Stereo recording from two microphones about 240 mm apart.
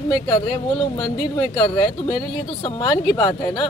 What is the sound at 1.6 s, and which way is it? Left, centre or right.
Speech, left.